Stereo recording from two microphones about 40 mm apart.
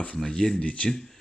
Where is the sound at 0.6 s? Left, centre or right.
Left.